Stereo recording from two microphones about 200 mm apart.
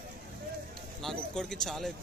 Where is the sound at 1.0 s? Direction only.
Centre (ahead or behind).